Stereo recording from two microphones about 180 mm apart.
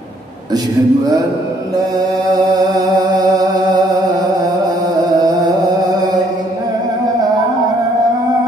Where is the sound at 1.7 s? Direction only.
20° right (ahead or behind).